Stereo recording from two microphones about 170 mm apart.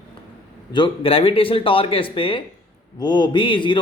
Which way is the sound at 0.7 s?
30° left (ahead or behind).